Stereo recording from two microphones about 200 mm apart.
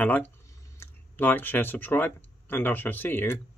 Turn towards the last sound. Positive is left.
turn(degrees=10)  # may be behind; listen again after turning